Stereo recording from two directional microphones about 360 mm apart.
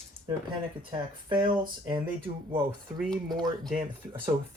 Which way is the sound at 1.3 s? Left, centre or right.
Centre.